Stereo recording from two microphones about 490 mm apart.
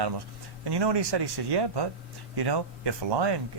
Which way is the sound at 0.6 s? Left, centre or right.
Right.